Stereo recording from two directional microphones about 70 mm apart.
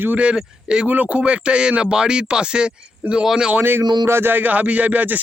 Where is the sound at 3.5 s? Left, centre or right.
Right.